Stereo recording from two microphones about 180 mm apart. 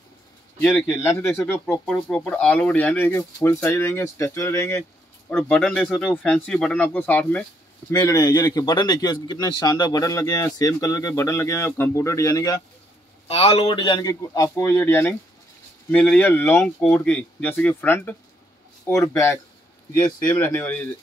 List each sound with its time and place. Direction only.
0.6 s speech: 15° left (ahead or behind)
5.4 s speech: 5° left (ahead or behind)
7.9 s a man's voice: 20° left (ahead or behind)
13.3 s a man's voice: 35° left (ahead or behind); by 20.8 s 10° left (ahead or behind)